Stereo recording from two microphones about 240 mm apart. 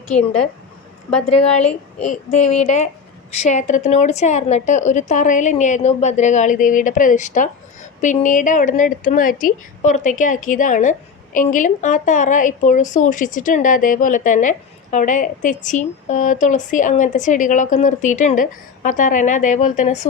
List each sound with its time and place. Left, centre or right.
1.3 s a woman's voice: left